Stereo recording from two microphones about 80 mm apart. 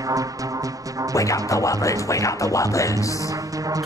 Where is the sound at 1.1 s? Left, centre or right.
Left.